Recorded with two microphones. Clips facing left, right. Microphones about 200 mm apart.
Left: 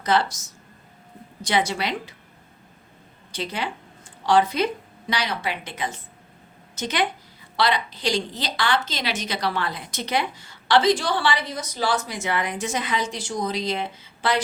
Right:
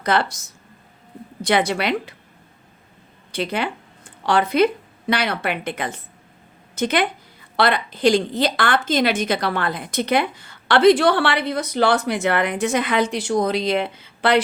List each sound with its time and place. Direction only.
0.0 s a woman's voice: 60° right (ahead or behind)
3.3 s a woman's voice: 60° right (ahead or behind)